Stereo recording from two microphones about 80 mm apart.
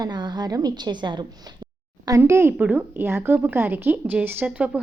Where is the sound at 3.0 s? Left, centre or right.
Right.